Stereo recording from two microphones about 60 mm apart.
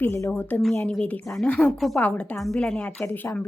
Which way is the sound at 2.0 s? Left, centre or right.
Centre.